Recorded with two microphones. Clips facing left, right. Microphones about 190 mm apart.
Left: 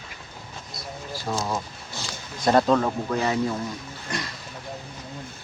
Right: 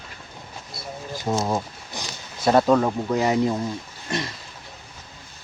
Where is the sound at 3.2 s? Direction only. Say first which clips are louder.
Right 5 dB; 20° right (ahead or behind).